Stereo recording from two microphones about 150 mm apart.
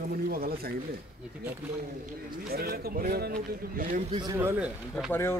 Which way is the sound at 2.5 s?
90° right.